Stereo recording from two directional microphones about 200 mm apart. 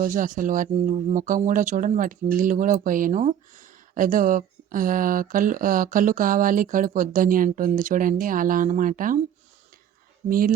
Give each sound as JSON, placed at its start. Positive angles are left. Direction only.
{"t": 0.0, "sound": "speech", "side_deg": -40}
{"t": 10.2, "sound": "speech", "side_deg": -45}